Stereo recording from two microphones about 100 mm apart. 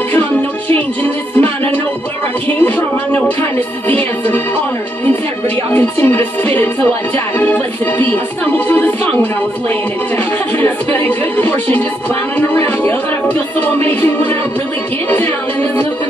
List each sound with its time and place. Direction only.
1.4 s music: 15° left (ahead or behind)
5.7 s music: 20° left (ahead or behind)